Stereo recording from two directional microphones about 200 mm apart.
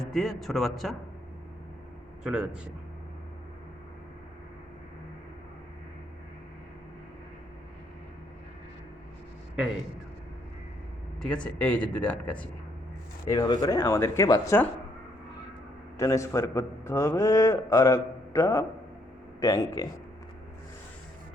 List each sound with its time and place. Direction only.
0.0 s speech: centre (ahead or behind)
2.2 s speech: 5° right (ahead or behind)
11.2 s speech: 5° left (ahead or behind)
13.3 s a man's voice: 20° left (ahead or behind)
16.0 s a man's voice: 15° left (ahead or behind)